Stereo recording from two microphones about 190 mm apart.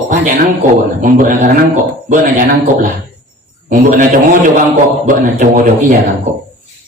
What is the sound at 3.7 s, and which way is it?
A man's voice, 45° right (ahead or behind).